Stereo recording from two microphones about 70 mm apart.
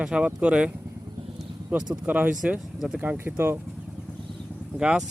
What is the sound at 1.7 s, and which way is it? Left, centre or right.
Speech, centre.